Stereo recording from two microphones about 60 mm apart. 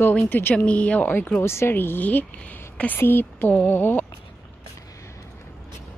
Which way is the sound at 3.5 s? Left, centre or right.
Left.